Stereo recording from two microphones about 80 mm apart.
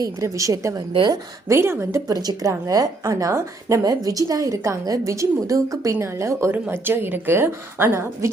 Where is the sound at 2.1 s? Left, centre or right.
Right.